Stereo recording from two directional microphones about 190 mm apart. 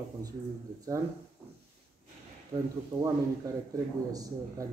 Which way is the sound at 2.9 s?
20° right (ahead or behind).